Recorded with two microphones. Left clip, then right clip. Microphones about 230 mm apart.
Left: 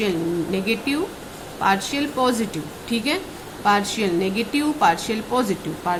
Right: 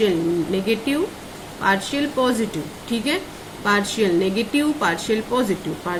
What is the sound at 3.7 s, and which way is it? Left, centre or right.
Speech, centre.